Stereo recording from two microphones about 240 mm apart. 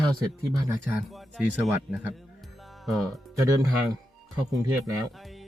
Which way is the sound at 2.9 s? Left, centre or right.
Centre.